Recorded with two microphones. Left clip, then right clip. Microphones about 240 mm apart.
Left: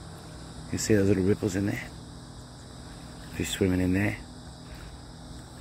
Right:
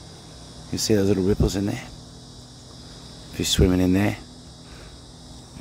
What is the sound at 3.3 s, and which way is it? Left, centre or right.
Speech, centre.